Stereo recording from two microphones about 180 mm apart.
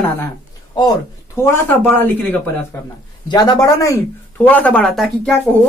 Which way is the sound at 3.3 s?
20° left (ahead or behind).